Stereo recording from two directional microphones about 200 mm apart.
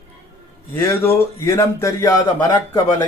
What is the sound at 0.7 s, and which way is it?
Speech, 15° left (ahead or behind).